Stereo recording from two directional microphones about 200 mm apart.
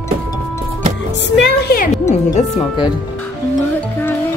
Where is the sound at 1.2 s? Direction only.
60° left (ahead or behind).